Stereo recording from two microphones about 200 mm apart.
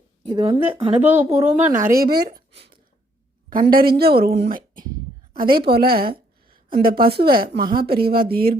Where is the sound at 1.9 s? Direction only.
50° right (ahead or behind).